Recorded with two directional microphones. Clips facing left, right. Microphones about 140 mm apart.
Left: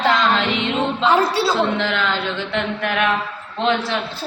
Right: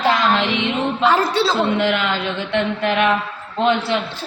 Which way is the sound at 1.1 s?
10° left (ahead or behind).